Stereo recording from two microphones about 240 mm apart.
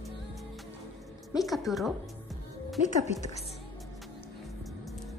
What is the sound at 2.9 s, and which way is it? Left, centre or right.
Speech, left.